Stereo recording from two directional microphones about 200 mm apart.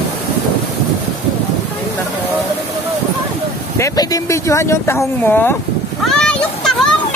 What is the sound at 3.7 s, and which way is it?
Speech, 15° left (ahead or behind).